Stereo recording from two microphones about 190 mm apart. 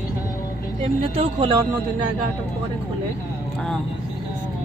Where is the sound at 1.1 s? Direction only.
30° right (ahead or behind).